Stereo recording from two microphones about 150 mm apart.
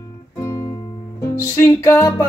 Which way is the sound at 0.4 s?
20° left (ahead or behind).